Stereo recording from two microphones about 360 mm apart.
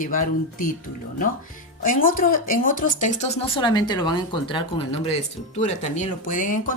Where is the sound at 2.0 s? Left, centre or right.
Left.